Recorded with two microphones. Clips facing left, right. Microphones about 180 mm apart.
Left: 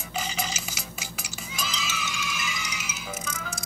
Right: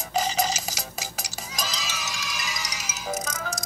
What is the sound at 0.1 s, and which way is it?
Stir, 40° right (ahead or behind).